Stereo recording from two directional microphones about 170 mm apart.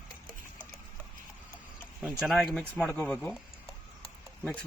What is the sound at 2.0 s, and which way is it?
Speech, centre (ahead or behind).